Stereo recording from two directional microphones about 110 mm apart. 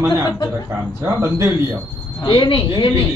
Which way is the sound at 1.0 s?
25° right (ahead or behind).